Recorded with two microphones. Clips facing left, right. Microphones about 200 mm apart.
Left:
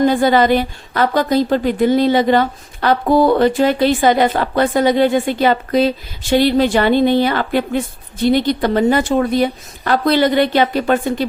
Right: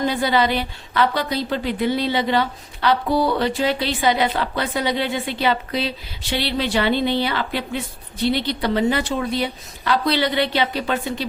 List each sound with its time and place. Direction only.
0.0 s a woman's voice: 50° left (ahead or behind)